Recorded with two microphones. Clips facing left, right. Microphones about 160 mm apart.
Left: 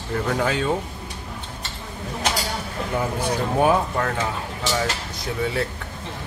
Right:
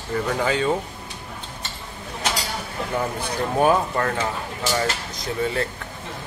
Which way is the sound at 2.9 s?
Centre (ahead or behind).